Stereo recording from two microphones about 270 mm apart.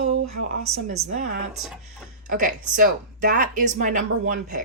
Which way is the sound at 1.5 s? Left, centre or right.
Centre.